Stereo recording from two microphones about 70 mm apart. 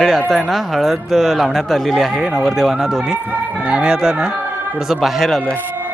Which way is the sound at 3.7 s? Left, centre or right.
Centre.